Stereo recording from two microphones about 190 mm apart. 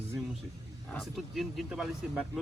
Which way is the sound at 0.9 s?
Centre (ahead or behind).